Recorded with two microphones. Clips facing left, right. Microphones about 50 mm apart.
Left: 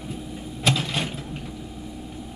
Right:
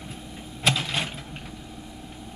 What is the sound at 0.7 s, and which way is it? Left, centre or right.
Mechanisms, centre.